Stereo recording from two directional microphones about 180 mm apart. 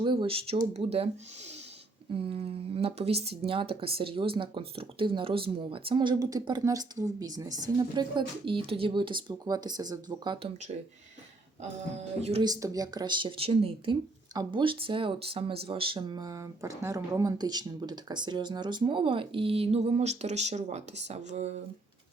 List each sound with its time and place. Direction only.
0.0 s speech: 25° right (ahead or behind)
12.4 s speech: 20° right (ahead or behind); by 21.5 s 40° right (ahead or behind)